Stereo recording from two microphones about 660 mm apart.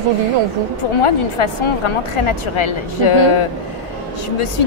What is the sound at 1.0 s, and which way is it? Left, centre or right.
A woman's voice, left.